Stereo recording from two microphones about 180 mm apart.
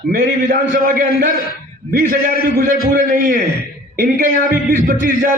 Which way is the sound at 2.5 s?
50° right (ahead or behind).